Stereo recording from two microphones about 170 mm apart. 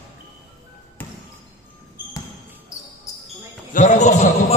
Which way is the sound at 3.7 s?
45° left (ahead or behind).